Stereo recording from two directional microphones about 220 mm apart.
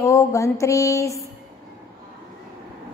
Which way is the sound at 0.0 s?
15° left (ahead or behind).